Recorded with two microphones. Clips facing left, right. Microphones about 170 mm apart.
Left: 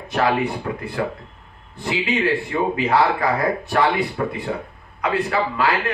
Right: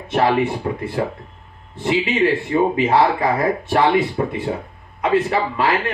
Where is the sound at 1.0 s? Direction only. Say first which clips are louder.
Right 2 dB; 30° right (ahead or behind).